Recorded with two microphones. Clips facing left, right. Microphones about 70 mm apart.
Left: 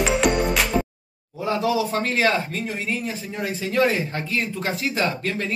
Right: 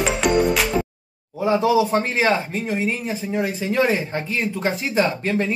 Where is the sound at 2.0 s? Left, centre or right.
Centre.